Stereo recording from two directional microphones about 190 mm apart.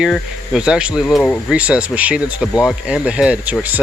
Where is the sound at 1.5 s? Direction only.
5° right (ahead or behind).